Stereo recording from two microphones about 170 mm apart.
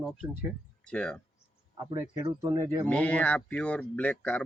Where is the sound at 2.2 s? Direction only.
20° right (ahead or behind).